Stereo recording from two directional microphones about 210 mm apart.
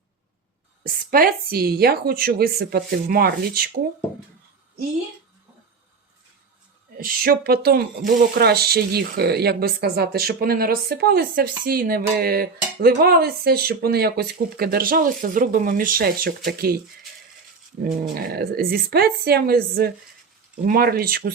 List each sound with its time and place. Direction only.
1.1 s speech: 45° right (ahead or behind)
6.9 s speech: 45° right (ahead or behind)
18.1 s speech: 50° right (ahead or behind)